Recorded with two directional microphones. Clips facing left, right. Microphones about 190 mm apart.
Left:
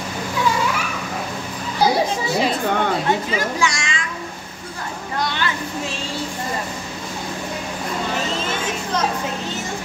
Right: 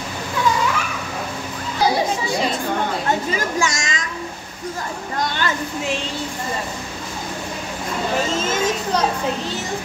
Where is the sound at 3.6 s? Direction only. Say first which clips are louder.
Even; 45° right (ahead or behind).